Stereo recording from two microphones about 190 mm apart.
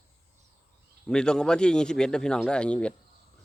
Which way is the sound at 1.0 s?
5° left (ahead or behind).